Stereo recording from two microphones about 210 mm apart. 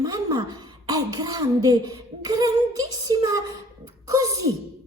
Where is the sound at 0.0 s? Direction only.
15° right (ahead or behind).